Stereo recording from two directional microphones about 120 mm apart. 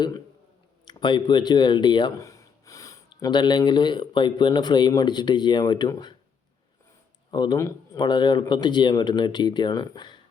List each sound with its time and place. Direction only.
0.9 s speech: 40° left (ahead or behind)
2.1 s gasp: 25° left (ahead or behind)
3.2 s speech: 35° left (ahead or behind)
7.3 s speech: 40° left (ahead or behind)